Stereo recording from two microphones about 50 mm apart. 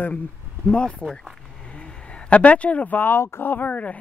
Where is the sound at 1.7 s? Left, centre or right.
Left.